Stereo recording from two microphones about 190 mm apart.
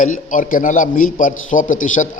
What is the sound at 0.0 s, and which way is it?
A man's voice, 45° left (ahead or behind).